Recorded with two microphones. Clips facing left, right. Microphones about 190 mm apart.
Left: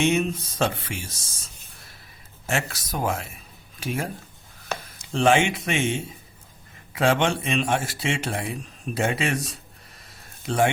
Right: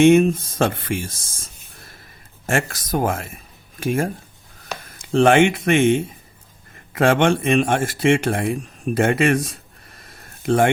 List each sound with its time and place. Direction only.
0.0 s speech: 50° right (ahead or behind)
2.5 s speech: 50° right (ahead or behind)
10.1 s a sound: 55° right (ahead or behind)